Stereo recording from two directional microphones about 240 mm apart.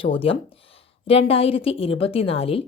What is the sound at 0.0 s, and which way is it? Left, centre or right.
A woman's voice, left.